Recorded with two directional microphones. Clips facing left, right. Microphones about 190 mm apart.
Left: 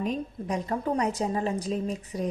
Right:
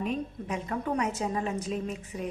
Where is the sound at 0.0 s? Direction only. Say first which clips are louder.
Left 2 dB; 35° left (ahead or behind).